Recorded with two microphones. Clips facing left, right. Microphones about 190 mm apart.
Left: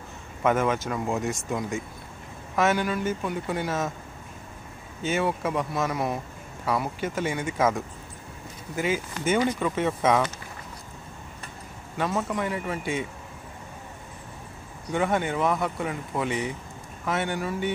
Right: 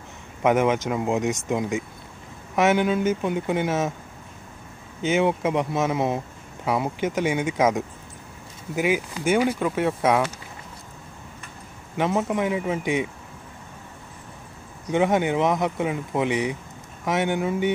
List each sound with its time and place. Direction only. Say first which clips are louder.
0.4 s speech: right 4 dB; 20° right (ahead or behind)
5.0 s speech: right 5 dB; 20° right (ahead or behind)
12.0 s speech: right 4 dB; 20° right (ahead or behind)
14.9 s speech: right 5 dB; 20° right (ahead or behind)